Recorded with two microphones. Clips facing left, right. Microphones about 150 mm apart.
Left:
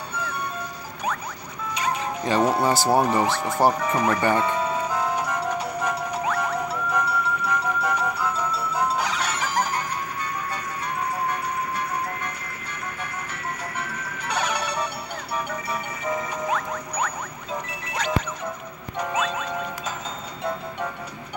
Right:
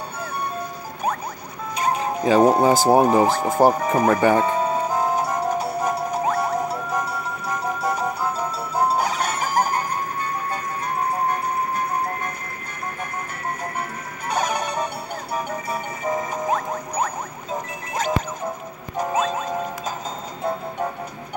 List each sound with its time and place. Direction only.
0.2 s music: 55° right (ahead or behind)
1.8 s music: 50° right (ahead or behind)
13.7 s music: 45° right (ahead or behind)